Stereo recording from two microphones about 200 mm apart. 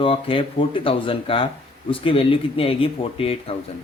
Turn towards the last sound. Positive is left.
turn(degrees=30)  # may be behind; listen again after turning